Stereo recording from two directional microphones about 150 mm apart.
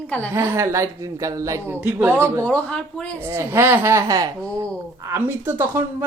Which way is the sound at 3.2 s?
15° right (ahead or behind).